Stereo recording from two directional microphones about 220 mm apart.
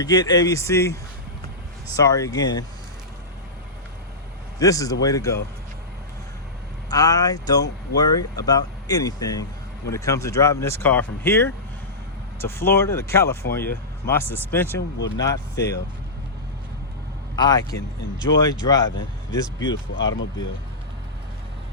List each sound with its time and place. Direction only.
0.0 s speech: 15° left (ahead or behind)
2.0 s speech: 15° left (ahead or behind)
4.6 s speech: 15° left (ahead or behind)
6.9 s speech: 15° left (ahead or behind)
14.8 s speech: 55° left (ahead or behind)
15.2 s speech: 15° left (ahead or behind)
17.3 s speech: 20° left (ahead or behind)